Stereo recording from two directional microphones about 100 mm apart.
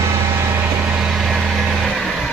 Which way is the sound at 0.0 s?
30° right (ahead or behind).